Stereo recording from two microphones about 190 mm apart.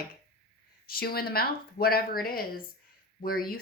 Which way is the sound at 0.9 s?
55° left (ahead or behind).